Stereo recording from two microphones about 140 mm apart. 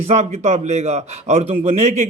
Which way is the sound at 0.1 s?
55° right (ahead or behind).